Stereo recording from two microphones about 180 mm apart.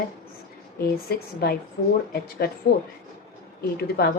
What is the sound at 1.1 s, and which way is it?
Speech, 55° left (ahead or behind).